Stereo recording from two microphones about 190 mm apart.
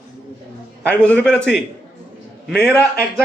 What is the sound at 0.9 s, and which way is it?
A woman's voice, 5° left (ahead or behind).